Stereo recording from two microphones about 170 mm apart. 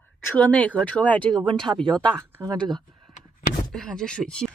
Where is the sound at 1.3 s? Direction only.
25° right (ahead or behind).